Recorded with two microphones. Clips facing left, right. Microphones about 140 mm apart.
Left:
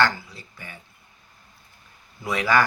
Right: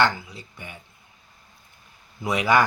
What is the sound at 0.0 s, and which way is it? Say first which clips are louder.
Speech: right 1 dB; 20° right (ahead or behind).